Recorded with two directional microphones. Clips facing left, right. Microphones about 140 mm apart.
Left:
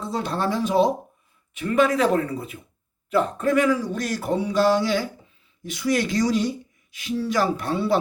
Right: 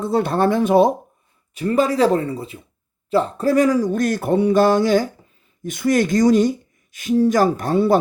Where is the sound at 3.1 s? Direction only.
35° right (ahead or behind); by 6.5 s 50° right (ahead or behind).